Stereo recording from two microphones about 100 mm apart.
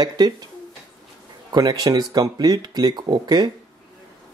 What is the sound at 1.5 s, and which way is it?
Speech, 40° right (ahead or behind).